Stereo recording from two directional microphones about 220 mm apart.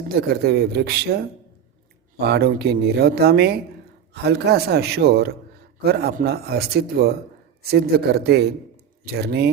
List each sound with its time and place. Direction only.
0.1 s speech: 45° right (ahead or behind)